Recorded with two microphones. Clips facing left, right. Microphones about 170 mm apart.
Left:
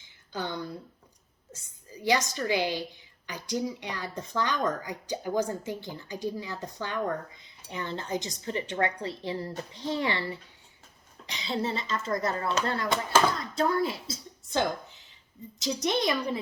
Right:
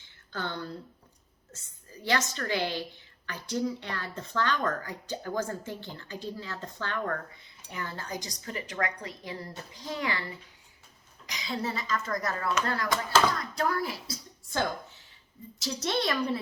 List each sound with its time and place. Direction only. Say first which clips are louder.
0.0 s a sound: left 2 dB; 15° left (ahead or behind)
1.9 s speech: left 3 dB; 15° left (ahead or behind); by 10.2 s 30° left (ahead or behind)
11.3 s speech: left 3 dB; 30° left (ahead or behind)